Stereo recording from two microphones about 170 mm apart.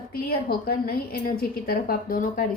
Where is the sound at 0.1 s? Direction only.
65° left (ahead or behind).